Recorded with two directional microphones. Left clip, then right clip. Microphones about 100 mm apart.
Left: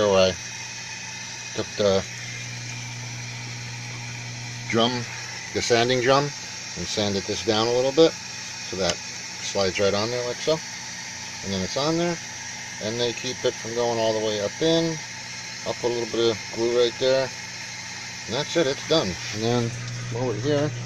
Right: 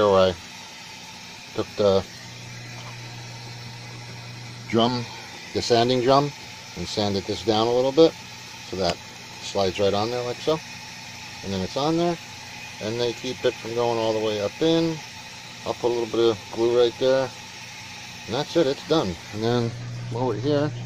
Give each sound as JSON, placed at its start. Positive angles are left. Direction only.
{"t": 0.0, "sound": "speech", "side_deg": -15}
{"t": 1.6, "sound": "speech", "side_deg": -15}
{"t": 5.5, "sound": "speech", "side_deg": -15}
{"t": 9.5, "sound": "speech", "side_deg": -10}
{"t": 18.3, "sound": "speech", "side_deg": -15}
{"t": 20.2, "sound": "speech", "side_deg": -5}